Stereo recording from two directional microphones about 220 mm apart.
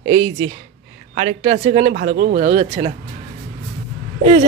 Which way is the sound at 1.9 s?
40° right (ahead or behind).